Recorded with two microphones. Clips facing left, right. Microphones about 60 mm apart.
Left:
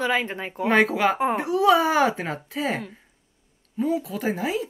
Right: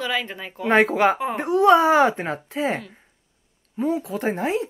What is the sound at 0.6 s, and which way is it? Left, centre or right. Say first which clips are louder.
Speech: right 2 dB; centre.